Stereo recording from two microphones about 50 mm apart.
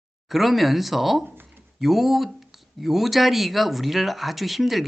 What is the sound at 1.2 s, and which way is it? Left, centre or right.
Speech, right.